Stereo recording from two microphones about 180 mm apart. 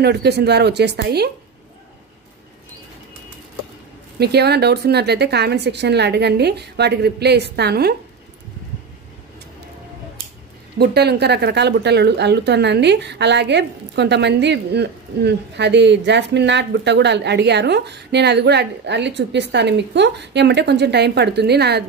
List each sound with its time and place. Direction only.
0.0 s speech: 65° right (ahead or behind)
4.2 s speech: 65° right (ahead or behind)
10.8 s speech: 65° right (ahead or behind)